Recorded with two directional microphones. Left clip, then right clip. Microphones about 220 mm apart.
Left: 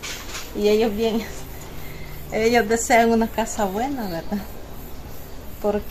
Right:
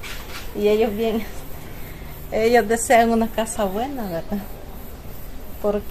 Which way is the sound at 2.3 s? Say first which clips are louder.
Right 2 dB; 20° right (ahead or behind).